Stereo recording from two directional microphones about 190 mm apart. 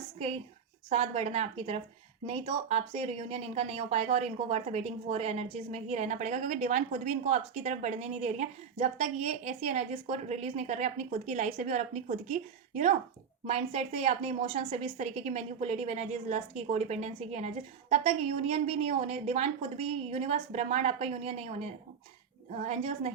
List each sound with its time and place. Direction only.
0.9 s a woman's voice: 35° right (ahead or behind)